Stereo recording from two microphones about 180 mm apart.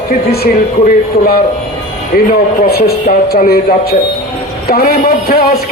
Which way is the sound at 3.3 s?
55° left (ahead or behind).